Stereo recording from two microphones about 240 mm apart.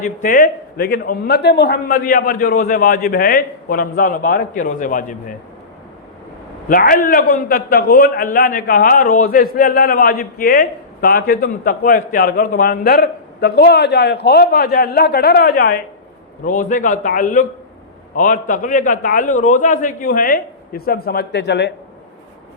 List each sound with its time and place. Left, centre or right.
0.0 s a man's voice: left
6.7 s a man's voice: left